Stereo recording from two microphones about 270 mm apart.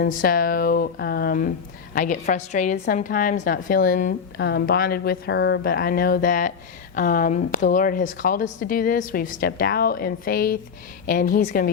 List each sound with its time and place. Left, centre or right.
0.0 s a woman's voice: left